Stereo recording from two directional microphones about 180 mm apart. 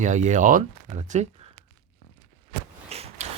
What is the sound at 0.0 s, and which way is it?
Speech, 40° right (ahead or behind).